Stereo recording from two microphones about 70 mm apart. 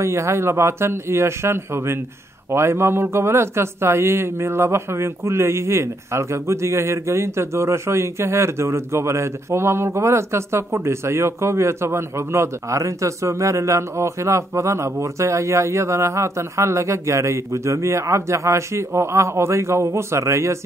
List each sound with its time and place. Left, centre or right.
0.0 s speech: right